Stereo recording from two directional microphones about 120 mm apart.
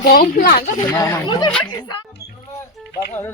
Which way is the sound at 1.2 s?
40° left (ahead or behind).